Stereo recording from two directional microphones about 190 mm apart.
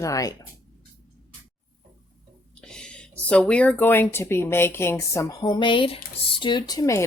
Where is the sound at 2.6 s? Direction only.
5° left (ahead or behind).